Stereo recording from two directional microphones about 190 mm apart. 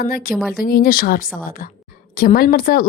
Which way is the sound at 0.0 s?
50° left (ahead or behind).